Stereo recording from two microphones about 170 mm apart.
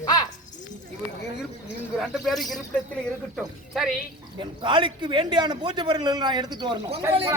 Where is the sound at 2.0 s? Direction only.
Centre (ahead or behind).